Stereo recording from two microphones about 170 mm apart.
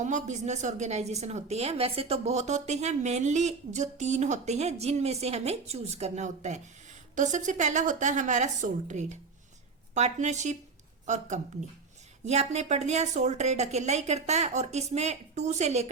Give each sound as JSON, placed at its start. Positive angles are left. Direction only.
{"t": 0.0, "sound": "a woman's voice", "side_deg": -45}